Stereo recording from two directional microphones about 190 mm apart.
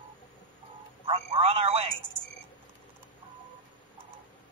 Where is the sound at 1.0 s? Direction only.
30° right (ahead or behind).